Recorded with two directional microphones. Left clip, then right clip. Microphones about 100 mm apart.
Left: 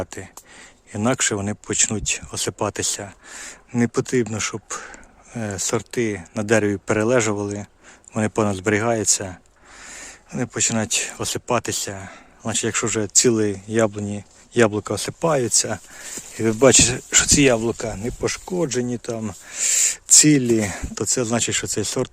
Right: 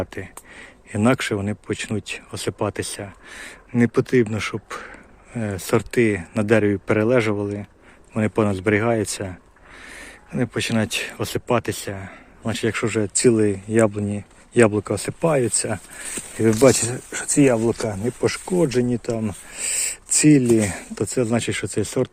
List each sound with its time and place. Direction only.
0.0 s speech: 20° left (ahead or behind)
1.2 s speech: 35° left (ahead or behind)
5.7 s speech: centre (ahead or behind)
6.4 s speech: 30° left (ahead or behind)
16.5 s speech: 45° left (ahead or behind)
16.9 s speech: 60° left (ahead or behind)
18.3 s speech: 5° left (ahead or behind)
19.3 s speech: 35° left (ahead or behind)